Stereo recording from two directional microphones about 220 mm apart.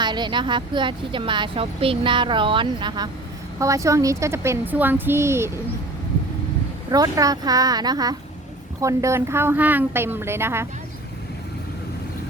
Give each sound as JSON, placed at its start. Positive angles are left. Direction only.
{"t": 0.0, "sound": "a woman's voice", "side_deg": -20}
{"t": 6.9, "sound": "speech", "side_deg": -15}